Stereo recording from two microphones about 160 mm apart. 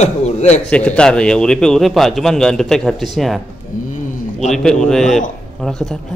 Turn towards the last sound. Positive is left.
turn(degrees=5)  # may be behind; listen again after turning